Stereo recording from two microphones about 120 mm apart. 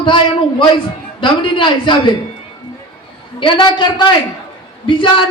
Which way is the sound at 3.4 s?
45° left (ahead or behind).